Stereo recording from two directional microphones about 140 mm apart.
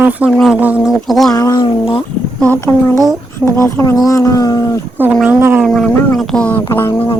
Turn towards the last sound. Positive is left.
turn(degrees=10)  # may be behind; listen again after turning